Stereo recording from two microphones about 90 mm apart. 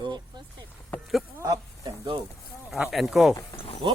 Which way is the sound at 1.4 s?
40° right (ahead or behind).